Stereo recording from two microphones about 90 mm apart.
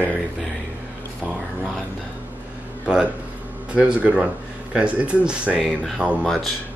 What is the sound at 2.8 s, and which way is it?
Speech, 10° right (ahead or behind).